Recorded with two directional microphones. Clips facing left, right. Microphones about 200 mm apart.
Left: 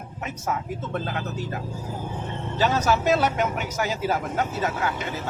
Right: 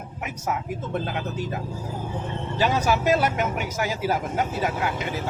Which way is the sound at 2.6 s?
10° right (ahead or behind).